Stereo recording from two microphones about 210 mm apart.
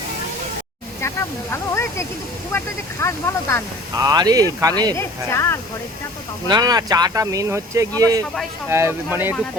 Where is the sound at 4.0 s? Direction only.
20° right (ahead or behind).